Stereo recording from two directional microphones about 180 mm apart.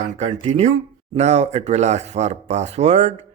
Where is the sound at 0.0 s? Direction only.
35° right (ahead or behind).